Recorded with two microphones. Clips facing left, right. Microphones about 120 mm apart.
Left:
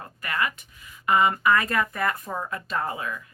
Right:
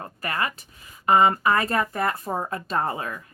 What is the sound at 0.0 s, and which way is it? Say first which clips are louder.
Speech: right 1 dB; 35° right (ahead or behind).